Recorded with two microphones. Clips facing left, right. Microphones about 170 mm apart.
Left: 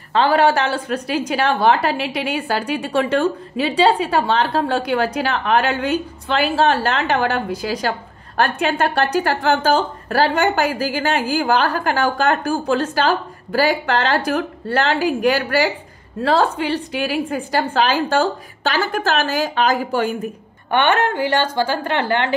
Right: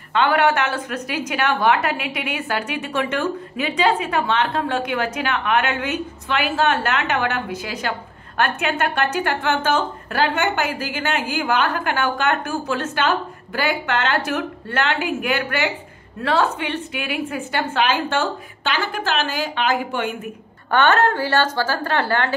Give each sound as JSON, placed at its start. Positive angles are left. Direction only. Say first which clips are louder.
{"t": 0.1, "sound": "a woman's voice", "louder": "left 3 dB", "side_deg": 35}
{"t": 20.7, "sound": "a woman's voice", "louder": "even", "side_deg": 15}